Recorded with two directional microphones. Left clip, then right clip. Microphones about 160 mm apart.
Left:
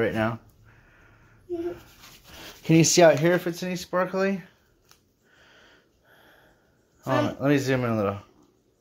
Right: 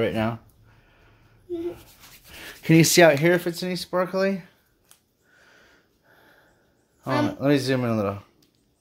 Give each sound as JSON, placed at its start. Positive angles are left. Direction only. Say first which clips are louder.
{"t": 0.0, "sound": "speech", "louder": "even", "side_deg": -20}
{"t": 1.5, "sound": "speech", "louder": "even", "side_deg": -20}
{"t": 5.4, "sound": "sniff", "louder": "even", "side_deg": -10}
{"t": 7.1, "sound": "speech", "louder": "right 1 dB", "side_deg": -20}